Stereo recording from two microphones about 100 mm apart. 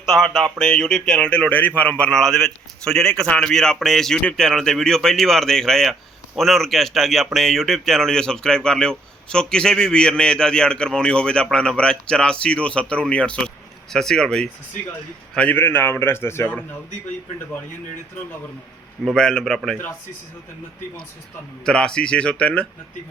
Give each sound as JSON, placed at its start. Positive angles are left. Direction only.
{"t": 0.1, "sound": "speech", "side_deg": 0}
{"t": 15.4, "sound": "a man's voice", "side_deg": 20}
{"t": 19.0, "sound": "speech", "side_deg": 5}
{"t": 21.6, "sound": "speech", "side_deg": 10}